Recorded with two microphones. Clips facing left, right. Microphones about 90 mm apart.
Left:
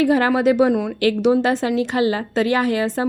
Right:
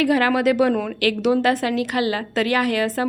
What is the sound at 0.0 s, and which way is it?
A woman's voice, 25° left (ahead or behind).